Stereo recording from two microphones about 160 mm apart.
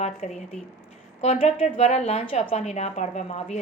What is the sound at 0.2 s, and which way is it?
A woman's voice, 45° left (ahead or behind).